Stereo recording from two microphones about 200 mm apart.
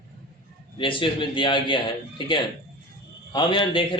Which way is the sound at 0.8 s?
25° left (ahead or behind).